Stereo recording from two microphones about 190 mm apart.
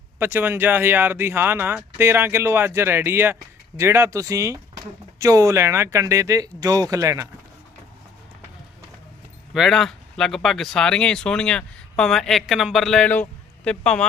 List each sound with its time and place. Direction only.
0.2 s speech: 10° right (ahead or behind)
9.6 s speech: centre (ahead or behind)